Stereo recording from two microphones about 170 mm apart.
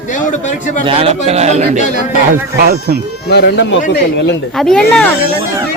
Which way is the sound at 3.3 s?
85° left.